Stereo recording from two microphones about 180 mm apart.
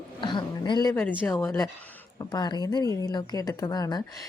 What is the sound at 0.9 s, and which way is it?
A woman's voice, 10° left (ahead or behind).